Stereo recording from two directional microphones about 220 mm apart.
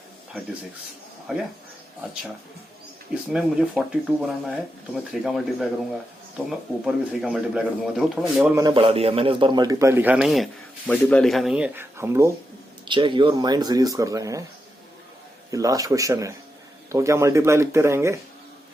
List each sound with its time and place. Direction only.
1.3 s speech: 5° right (ahead or behind)
3.3 s speech: 5° right (ahead or behind)
8.5 s a man's voice: 20° right (ahead or behind)
15.4 s a man's voice: 15° right (ahead or behind)